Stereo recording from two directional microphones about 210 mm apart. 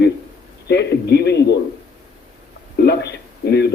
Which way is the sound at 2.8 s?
50° left (ahead or behind).